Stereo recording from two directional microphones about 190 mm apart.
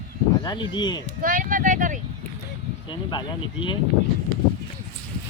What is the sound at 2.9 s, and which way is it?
Speech, 25° left (ahead or behind).